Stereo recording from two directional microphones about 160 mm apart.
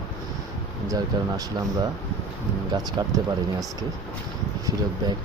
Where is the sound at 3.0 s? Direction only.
25° right (ahead or behind).